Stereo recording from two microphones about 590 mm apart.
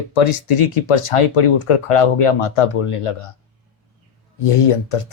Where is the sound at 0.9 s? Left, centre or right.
Left.